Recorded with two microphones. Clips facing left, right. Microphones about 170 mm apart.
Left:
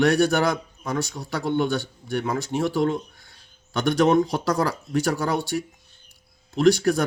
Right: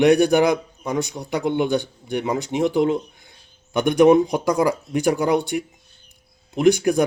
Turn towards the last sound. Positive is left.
turn(degrees=-15)  # may be behind; listen again after turning